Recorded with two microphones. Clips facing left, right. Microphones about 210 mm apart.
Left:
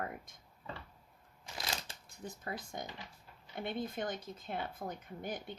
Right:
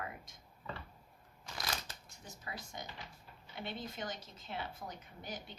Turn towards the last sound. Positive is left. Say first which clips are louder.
# left 5 dB
turn(degrees=55)  # may be behind; listen again after turning